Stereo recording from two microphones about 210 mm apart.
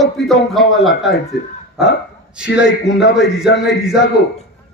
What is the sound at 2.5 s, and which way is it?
Speech, 55° left (ahead or behind).